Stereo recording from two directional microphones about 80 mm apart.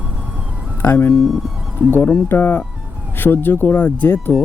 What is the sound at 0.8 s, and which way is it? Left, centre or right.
Speech, left.